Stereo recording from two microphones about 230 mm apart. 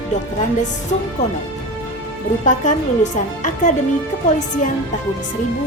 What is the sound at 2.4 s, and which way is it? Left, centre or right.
A woman's voice, left.